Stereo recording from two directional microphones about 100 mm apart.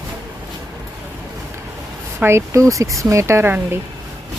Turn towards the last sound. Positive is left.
turn(degrees=-25)  # may be behind; listen again after turning